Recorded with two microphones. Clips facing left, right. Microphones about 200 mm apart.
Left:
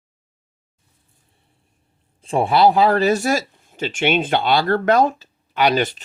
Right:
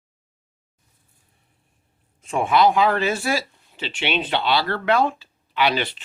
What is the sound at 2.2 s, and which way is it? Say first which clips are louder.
Speech: left 3 dB; 35° left (ahead or behind).